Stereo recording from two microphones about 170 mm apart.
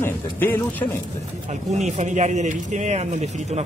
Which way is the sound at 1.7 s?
45° right (ahead or behind).